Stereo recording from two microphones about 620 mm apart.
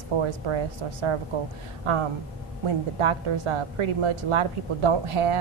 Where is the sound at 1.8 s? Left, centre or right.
Right.